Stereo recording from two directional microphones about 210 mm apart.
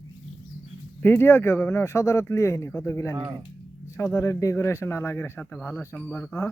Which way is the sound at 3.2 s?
20° right (ahead or behind).